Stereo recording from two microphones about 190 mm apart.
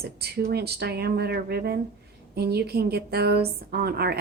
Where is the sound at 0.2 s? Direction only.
60° right (ahead or behind).